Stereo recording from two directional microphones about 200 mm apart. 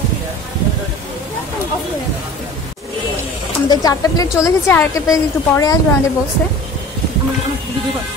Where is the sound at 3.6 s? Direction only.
20° left (ahead or behind).